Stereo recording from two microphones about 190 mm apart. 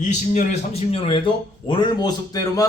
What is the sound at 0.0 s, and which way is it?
A man's voice, 40° left (ahead or behind).